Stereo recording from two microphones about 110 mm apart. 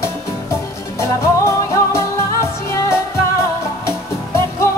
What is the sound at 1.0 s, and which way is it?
Music, 25° left (ahead or behind).